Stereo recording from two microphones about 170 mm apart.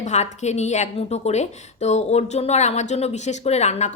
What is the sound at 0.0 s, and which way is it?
A woman's voice, 40° left (ahead or behind).